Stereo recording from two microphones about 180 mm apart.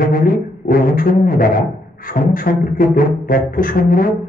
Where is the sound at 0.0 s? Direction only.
50° left (ahead or behind).